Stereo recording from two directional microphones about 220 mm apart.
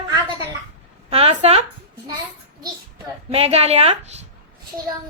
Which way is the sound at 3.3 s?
30° right (ahead or behind).